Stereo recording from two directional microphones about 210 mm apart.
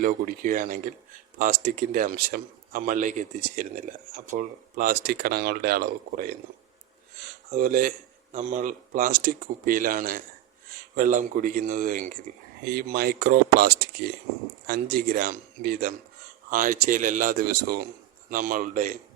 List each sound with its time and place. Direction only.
0.0 s speech: 40° right (ahead or behind)
7.5 s speech: 40° right (ahead or behind)